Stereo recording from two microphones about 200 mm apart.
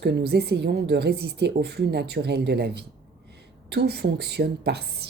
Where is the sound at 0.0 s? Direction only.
55° right (ahead or behind).